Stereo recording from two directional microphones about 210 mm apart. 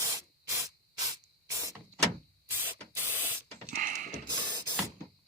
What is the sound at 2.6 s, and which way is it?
Spray, 10° right (ahead or behind).